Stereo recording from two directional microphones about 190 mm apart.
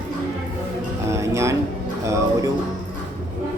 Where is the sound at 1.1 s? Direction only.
15° right (ahead or behind).